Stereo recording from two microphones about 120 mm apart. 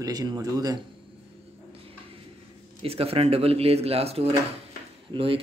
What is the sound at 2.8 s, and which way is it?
Speech, 55° right (ahead or behind).